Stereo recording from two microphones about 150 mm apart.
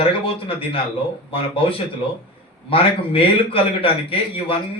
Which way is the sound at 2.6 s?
35° left (ahead or behind).